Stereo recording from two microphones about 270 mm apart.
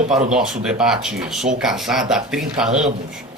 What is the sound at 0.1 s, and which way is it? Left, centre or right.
Speech, centre.